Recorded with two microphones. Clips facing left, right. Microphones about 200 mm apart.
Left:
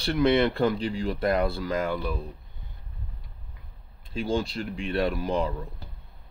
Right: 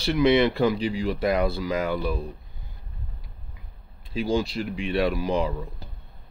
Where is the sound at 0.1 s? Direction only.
5° right (ahead or behind).